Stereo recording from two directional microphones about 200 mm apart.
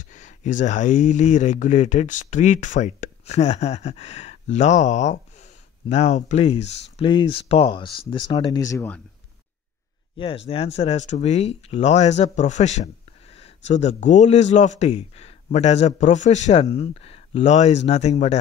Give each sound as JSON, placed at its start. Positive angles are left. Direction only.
{"t": 0.1, "sound": "speech", "side_deg": 40}
{"t": 10.1, "sound": "speech", "side_deg": 25}